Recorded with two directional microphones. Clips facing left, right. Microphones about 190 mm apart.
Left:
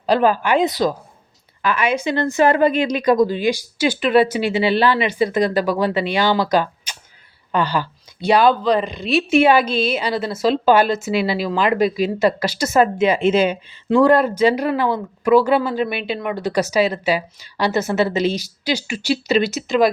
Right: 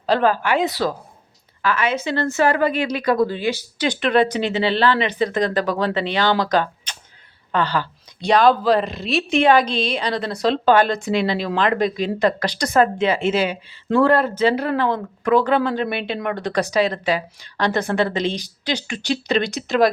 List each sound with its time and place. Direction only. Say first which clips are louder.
0.0 s a woman's voice: left 2 dB; 15° left (ahead or behind)